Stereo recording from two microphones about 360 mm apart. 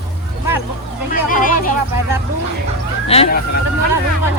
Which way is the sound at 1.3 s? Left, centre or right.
Left.